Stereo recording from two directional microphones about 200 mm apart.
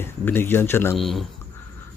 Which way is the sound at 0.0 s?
10° left (ahead or behind).